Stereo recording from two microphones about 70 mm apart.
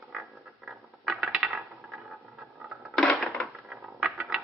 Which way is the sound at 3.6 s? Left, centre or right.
Centre.